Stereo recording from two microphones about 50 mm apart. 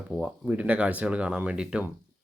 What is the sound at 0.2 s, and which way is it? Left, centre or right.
Speech, right.